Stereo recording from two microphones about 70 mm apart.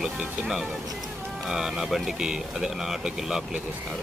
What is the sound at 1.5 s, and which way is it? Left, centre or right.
Speech, centre.